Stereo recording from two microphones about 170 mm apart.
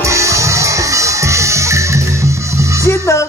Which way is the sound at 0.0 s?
15° right (ahead or behind).